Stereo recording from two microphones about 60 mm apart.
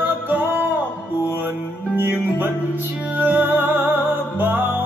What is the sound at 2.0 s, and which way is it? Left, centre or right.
Music, right.